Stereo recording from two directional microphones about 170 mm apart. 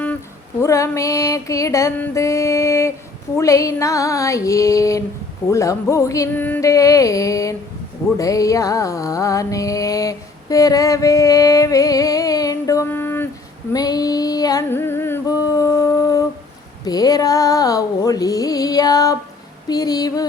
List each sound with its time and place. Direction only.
0.6 s music: 20° left (ahead or behind)
13.7 s a sound: 20° left (ahead or behind)
16.8 s music: 25° left (ahead or behind)